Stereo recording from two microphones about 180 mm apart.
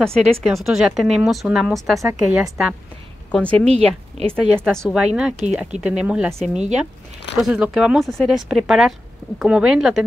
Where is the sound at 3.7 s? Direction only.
35° right (ahead or behind).